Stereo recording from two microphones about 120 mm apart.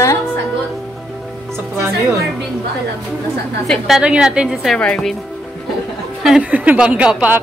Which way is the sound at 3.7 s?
Centre (ahead or behind).